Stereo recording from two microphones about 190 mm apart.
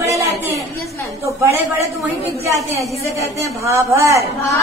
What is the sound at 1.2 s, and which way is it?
A woman's voice, 15° right (ahead or behind).